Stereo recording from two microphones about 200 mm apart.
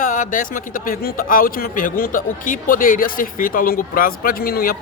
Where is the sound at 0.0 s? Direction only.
40° left (ahead or behind).